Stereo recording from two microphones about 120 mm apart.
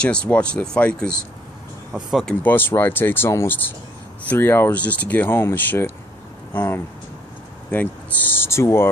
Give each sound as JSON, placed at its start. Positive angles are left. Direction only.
{"t": 0.0, "sound": "speech", "side_deg": 10}
{"t": 2.4, "sound": "speech", "side_deg": 15}